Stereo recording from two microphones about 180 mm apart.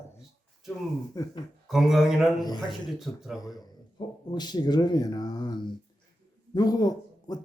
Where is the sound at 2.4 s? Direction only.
25° left (ahead or behind).